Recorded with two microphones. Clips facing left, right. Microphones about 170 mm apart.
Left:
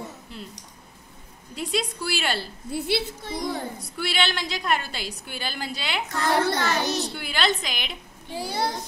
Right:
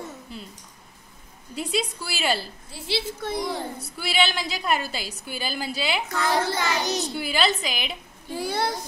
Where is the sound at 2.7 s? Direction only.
55° left (ahead or behind).